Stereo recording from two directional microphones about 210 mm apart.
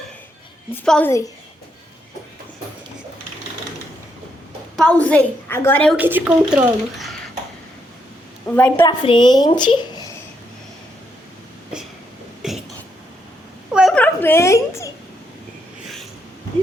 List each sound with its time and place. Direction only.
0.9 s a woman's voice: 5° left (ahead or behind)
4.8 s a woman's voice: 5° left (ahead or behind)
6.0 s a woman's voice: 10° right (ahead or behind)
8.4 s a woman's voice: 5° left (ahead or behind)
8.9 s a woman's voice: 20° left (ahead or behind)
12.4 s a sound: centre (ahead or behind)
13.7 s a sound: centre (ahead or behind)